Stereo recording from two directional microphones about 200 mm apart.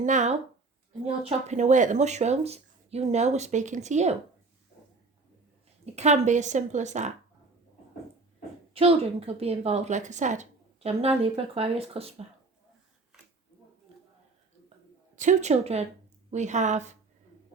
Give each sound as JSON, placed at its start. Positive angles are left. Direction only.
{"t": 0.0, "sound": "a woman's voice", "side_deg": -35}
{"t": 5.8, "sound": "a woman's voice", "side_deg": -35}
{"t": 8.7, "sound": "a woman's voice", "side_deg": -30}
{"t": 15.1, "sound": "a woman's voice", "side_deg": -40}